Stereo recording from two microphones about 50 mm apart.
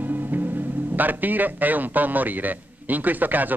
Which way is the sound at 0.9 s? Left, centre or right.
Right.